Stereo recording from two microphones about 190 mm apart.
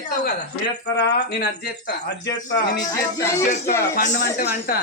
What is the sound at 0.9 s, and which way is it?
Speech, 60° left (ahead or behind).